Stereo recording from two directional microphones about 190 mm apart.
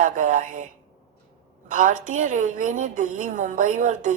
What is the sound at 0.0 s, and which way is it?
A woman's voice, 45° right (ahead or behind).